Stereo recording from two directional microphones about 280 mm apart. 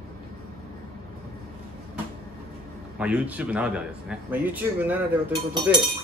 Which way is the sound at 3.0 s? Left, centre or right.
Centre.